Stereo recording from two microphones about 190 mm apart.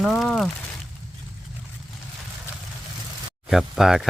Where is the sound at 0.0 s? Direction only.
Centre (ahead or behind).